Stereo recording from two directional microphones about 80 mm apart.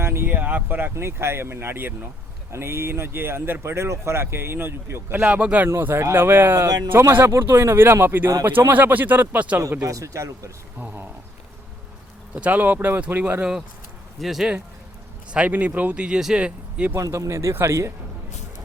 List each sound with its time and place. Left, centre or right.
0.0 s speech: right
5.2 s speech: centre
5.6 s speech: right
9.8 s speech: right
10.8 s speech: right
12.3 s speech: centre
13.4 s speech: centre
15.3 s speech: centre
16.9 s speech: right